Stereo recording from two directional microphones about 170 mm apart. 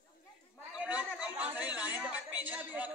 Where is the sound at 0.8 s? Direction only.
5° right (ahead or behind).